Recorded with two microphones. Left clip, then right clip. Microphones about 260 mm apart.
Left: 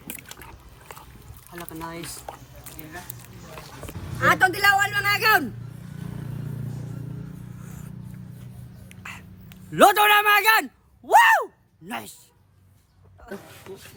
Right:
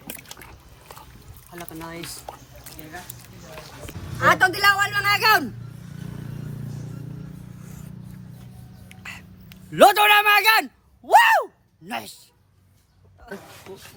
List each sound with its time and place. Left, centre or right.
1.7 s speech: centre
2.1 s speech: left
3.5 s speech: centre
3.9 s a sound: left
4.2 s a man's voice: centre
5.8 s vehicle: left
8.9 s a sound: centre
11.9 s speech: centre